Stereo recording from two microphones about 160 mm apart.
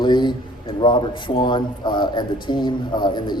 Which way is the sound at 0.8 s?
30° left (ahead or behind).